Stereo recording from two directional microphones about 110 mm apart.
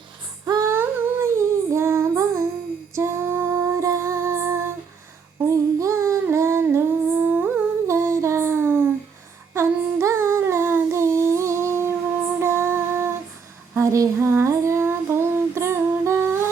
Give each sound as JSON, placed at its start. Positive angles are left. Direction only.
{"t": 0.4, "sound": "female singing", "side_deg": -35}
{"t": 0.7, "sound": "humming", "side_deg": -20}
{"t": 2.9, "sound": "female singing", "side_deg": -25}
{"t": 5.5, "sound": "humming", "side_deg": -30}
{"t": 12.4, "sound": "female singing", "side_deg": -25}